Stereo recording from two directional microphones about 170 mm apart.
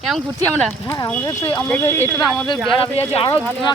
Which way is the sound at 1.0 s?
20° left (ahead or behind).